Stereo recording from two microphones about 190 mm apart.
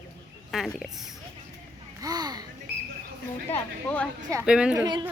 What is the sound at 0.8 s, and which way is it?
Speech, centre (ahead or behind).